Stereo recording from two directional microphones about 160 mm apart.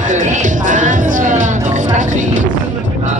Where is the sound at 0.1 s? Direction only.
50° right (ahead or behind).